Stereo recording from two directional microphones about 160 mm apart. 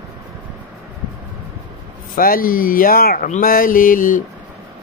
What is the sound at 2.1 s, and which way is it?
Speech, 65° left (ahead or behind).